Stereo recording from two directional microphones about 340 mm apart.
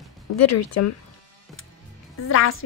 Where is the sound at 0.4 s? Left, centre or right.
Left.